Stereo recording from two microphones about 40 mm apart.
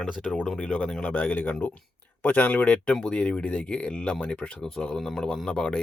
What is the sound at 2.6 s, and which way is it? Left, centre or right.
Speech, left.